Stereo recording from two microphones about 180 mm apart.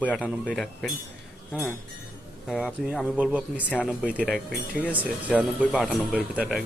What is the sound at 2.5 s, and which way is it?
Speech, centre (ahead or behind).